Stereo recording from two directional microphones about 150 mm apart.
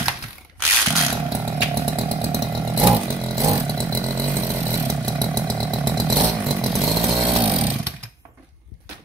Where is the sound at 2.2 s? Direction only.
20° right (ahead or behind).